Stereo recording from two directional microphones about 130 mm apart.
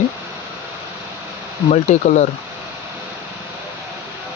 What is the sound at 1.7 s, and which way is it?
Speech, 65° left (ahead or behind).